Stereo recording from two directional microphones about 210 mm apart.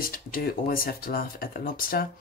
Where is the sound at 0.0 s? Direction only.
45° left (ahead or behind).